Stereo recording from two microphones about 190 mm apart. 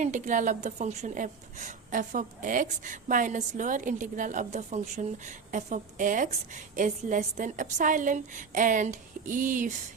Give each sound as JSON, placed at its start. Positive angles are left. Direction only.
{"t": 0.0, "sound": "a woman's voice", "side_deg": -40}